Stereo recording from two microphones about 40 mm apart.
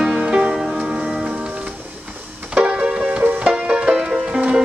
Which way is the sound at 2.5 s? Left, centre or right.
Right.